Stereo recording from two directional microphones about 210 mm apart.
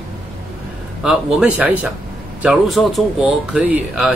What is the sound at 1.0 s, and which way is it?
Speech, 5° right (ahead or behind).